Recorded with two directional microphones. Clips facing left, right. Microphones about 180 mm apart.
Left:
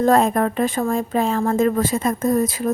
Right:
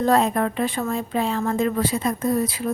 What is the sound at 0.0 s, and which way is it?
A woman's voice, 50° left (ahead or behind).